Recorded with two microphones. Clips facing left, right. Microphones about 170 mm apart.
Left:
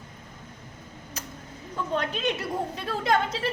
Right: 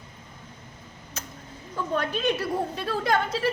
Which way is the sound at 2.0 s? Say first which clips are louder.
Right 3 dB; 20° left (ahead or behind).